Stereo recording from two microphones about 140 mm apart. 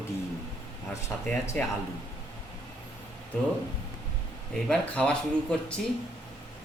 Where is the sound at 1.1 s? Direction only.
20° left (ahead or behind).